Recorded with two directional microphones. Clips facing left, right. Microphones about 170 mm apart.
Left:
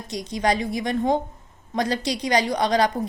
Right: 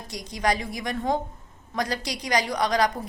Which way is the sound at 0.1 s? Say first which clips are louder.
Left 3 dB; 25° left (ahead or behind).